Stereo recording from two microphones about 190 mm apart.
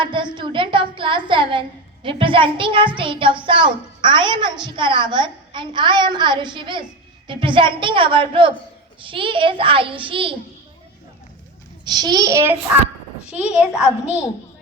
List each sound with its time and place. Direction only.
0.0 s a woman's voice: 25° right (ahead or behind)
11.9 s a woman's voice: 20° right (ahead or behind); by 14.3 s 5° right (ahead or behind)